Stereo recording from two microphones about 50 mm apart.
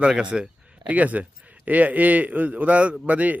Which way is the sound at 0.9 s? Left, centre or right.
Right.